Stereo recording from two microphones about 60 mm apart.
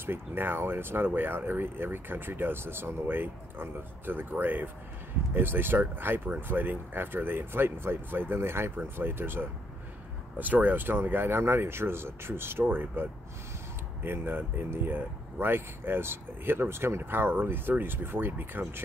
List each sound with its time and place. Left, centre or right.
0.0 s speech: right